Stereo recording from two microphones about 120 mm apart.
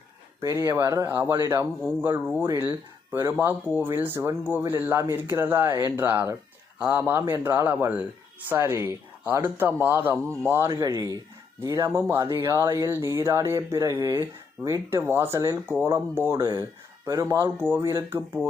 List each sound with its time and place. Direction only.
0.4 s speech: 25° right (ahead or behind)